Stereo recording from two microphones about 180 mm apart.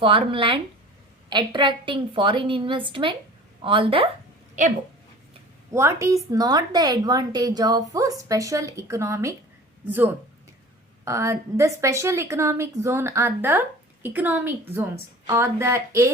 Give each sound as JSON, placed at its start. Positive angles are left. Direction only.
{"t": 0.0, "sound": "a woman's voice", "side_deg": -30}
{"t": 4.6, "sound": "speech", "side_deg": -45}
{"t": 5.7, "sound": "a woman's voice", "side_deg": -15}